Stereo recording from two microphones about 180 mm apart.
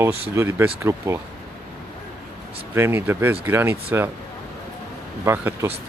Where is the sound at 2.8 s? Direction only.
10° right (ahead or behind).